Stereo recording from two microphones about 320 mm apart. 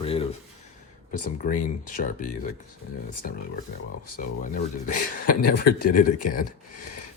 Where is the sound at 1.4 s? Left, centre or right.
Left.